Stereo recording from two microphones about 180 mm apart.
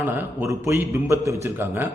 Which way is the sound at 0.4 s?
15° right (ahead or behind).